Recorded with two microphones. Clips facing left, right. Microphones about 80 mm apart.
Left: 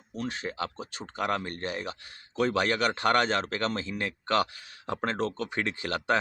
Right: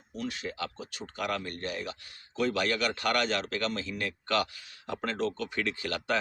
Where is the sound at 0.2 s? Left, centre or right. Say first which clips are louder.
Left 2 dB; left.